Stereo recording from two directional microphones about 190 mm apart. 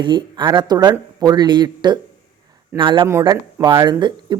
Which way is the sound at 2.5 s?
25° right (ahead or behind).